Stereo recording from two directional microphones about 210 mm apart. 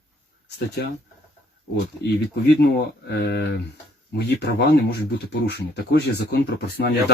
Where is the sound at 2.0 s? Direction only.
50° left (ahead or behind).